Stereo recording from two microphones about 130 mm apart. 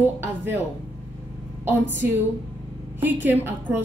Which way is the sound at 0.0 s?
15° right (ahead or behind).